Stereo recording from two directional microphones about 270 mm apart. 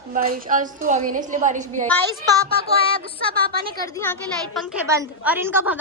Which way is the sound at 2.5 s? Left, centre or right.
Right.